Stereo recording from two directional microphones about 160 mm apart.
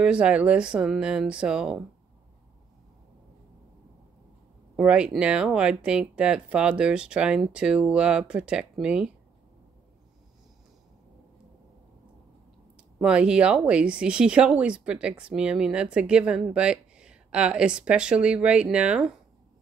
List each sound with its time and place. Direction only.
0.0 s speech: 5° right (ahead or behind)
4.7 s speech: 5° right (ahead or behind)
13.0 s speech: 5° right (ahead or behind)